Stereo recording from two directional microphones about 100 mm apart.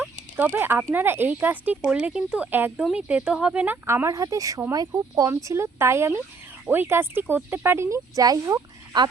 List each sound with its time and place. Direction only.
0.0 s a sound: 15° right (ahead or behind)
0.9 s speech: 20° right (ahead or behind)
3.8 s speech: 30° right (ahead or behind)